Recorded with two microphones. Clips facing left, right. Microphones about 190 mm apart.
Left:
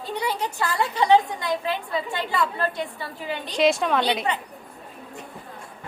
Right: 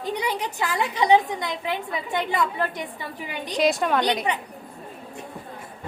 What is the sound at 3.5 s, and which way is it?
Speech, centre (ahead or behind).